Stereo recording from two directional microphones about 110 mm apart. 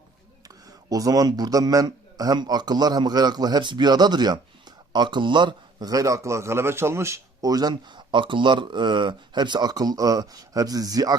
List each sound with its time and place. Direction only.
0.4 s speech: 35° right (ahead or behind)